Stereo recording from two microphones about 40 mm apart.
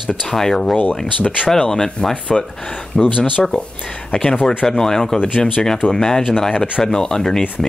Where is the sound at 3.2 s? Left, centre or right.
Right.